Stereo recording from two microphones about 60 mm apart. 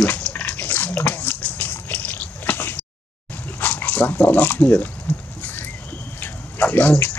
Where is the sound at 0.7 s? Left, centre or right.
Left.